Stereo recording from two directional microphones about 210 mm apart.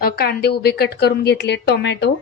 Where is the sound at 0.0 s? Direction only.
45° left (ahead or behind).